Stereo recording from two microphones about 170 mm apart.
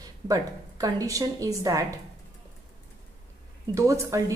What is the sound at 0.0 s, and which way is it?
A woman's voice, 20° right (ahead or behind).